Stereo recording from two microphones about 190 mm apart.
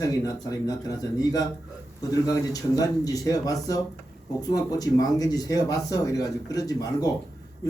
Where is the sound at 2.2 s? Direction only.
20° left (ahead or behind).